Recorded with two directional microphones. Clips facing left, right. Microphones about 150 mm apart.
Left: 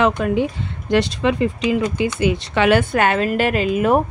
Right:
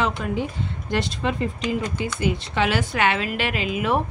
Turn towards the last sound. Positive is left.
turn(degrees=45)  # may be behind; listen again after turning